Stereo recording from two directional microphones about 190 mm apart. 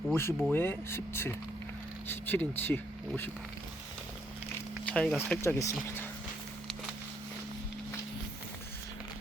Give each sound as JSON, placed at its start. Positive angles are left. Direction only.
{"t": 0.1, "sound": "speech", "side_deg": 15}
{"t": 4.9, "sound": "speech", "side_deg": 5}